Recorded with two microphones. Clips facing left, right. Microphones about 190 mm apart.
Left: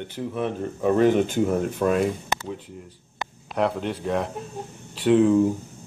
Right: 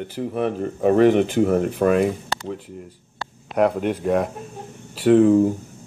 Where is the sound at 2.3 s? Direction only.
20° left (ahead or behind).